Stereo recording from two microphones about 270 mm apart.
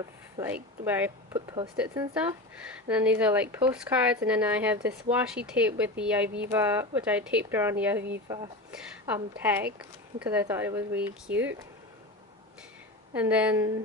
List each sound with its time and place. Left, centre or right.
0.4 s speech: centre
13.1 s speech: centre